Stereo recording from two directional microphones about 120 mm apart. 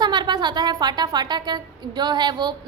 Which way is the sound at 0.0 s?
40° right (ahead or behind).